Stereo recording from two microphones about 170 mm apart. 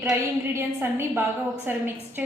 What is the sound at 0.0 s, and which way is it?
A woman's voice, 15° right (ahead or behind).